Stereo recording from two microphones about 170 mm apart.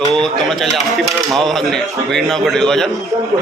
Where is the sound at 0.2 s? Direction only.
Centre (ahead or behind).